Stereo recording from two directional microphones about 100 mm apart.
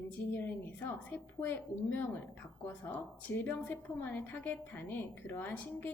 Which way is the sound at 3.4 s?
20° left (ahead or behind).